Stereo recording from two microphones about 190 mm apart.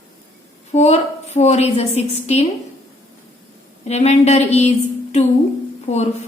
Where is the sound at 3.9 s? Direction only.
35° left (ahead or behind).